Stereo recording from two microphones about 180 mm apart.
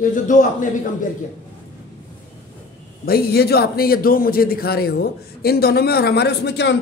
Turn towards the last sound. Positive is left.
turn(degrees=70)  # may be behind; listen again after turning